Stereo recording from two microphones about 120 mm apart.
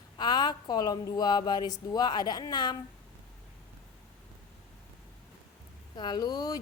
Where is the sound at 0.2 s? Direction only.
35° left (ahead or behind).